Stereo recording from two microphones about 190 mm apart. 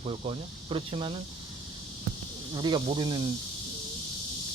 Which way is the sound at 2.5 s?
25° right (ahead or behind).